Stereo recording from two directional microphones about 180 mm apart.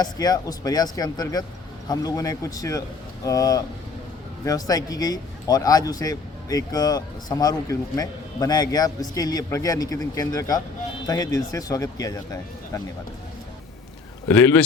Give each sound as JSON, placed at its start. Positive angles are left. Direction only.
{"t": 0.0, "sound": "speech", "side_deg": 20}
{"t": 14.3, "sound": "speech", "side_deg": 10}